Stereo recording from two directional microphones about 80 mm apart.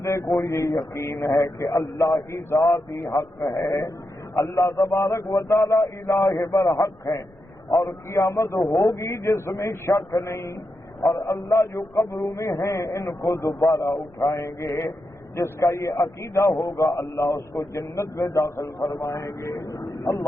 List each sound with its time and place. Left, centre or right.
0.0 s a man's voice: left